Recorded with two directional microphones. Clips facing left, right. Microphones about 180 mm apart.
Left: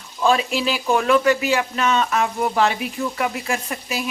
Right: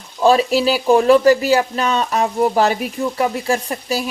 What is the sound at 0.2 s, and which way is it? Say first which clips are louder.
Speech: right 6 dB; 35° right (ahead or behind).